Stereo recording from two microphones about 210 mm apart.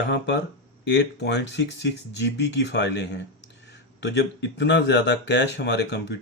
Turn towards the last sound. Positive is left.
turn(degrees=55)  # may be behind; listen again after turning